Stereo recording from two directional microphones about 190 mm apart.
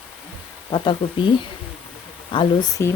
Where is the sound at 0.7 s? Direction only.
25° left (ahead or behind).